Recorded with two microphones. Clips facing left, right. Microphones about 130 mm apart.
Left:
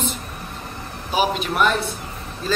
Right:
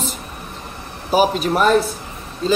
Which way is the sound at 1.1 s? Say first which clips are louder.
Right 5 dB; 40° right (ahead or behind).